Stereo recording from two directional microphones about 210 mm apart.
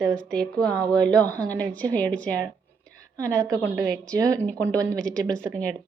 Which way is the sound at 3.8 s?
5° left (ahead or behind).